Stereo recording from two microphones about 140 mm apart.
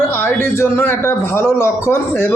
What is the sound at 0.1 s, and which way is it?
A man's voice, 15° left (ahead or behind).